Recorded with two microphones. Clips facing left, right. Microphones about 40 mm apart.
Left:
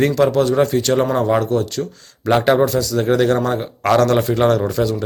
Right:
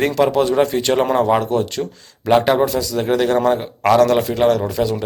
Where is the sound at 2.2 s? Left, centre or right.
Centre.